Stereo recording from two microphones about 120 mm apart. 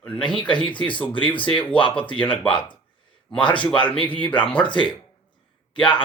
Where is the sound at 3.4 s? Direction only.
40° left (ahead or behind).